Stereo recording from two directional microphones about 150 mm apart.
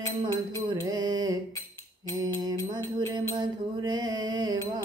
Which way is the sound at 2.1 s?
25° right (ahead or behind).